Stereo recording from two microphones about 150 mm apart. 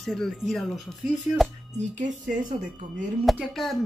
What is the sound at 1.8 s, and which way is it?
Speech, 55° right (ahead or behind).